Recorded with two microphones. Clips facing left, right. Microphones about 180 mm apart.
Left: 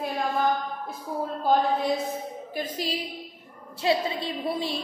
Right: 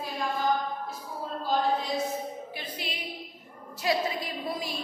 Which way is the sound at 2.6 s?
40° left (ahead or behind).